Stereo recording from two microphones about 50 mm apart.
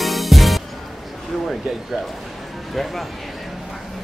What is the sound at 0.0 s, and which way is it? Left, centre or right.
Music, centre.